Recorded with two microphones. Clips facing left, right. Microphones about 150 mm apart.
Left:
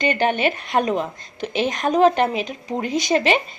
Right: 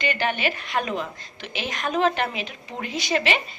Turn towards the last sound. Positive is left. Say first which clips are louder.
# left 6 dB
turn(degrees=40)  # may be behind; listen again after turning